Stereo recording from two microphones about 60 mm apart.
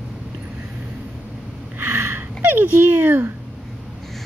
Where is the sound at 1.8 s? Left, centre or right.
Right.